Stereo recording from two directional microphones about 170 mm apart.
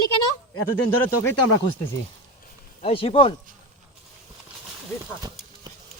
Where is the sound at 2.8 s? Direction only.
35° left (ahead or behind).